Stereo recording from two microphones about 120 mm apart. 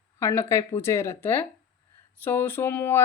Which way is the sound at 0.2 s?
25° left (ahead or behind).